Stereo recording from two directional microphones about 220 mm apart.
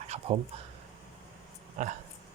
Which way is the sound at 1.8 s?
35° right (ahead or behind).